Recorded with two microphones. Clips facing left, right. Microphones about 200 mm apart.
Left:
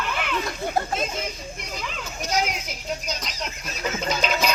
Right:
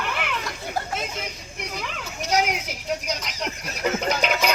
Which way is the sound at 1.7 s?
65° right (ahead or behind).